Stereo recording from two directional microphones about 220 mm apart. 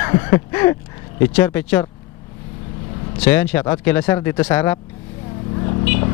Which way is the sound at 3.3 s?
10° left (ahead or behind).